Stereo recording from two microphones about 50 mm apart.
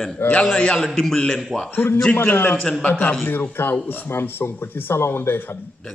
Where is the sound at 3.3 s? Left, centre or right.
Left.